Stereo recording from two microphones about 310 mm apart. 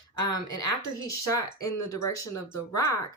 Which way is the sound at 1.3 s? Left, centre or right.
Centre.